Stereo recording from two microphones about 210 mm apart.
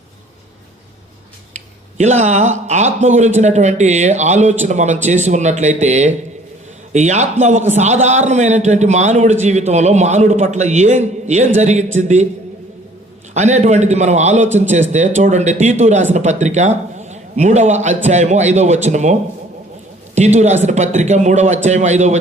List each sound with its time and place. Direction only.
1.5 s speech: 35° right (ahead or behind)
13.3 s speech: 35° right (ahead or behind)
20.1 s speech: 35° right (ahead or behind)